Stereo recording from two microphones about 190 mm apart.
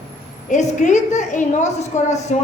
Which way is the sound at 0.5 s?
40° left (ahead or behind).